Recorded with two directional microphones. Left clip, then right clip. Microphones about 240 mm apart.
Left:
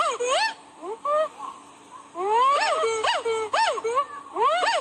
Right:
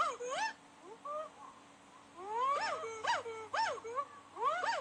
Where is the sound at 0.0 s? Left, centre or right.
Left.